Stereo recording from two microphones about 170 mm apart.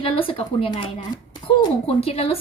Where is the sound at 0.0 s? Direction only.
30° left (ahead or behind).